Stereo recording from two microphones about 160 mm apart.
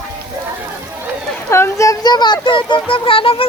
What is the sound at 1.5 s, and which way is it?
Speech, 20° left (ahead or behind).